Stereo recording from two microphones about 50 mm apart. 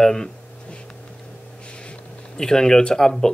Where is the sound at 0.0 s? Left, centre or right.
Centre.